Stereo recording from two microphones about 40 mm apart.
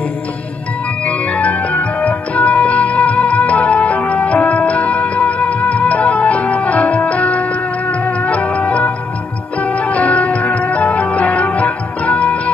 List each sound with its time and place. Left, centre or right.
1.0 s organ: left
8.0 s music: left